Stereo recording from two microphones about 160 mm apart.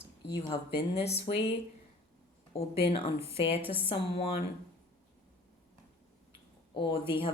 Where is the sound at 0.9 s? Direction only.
40° left (ahead or behind).